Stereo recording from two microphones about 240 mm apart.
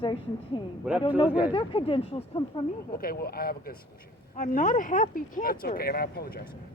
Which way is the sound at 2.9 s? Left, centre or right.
Left.